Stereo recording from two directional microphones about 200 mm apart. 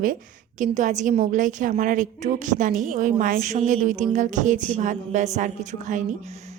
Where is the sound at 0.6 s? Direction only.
35° right (ahead or behind).